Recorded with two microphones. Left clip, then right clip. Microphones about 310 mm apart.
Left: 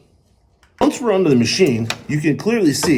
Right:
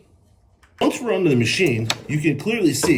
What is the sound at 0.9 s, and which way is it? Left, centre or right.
Speech, centre.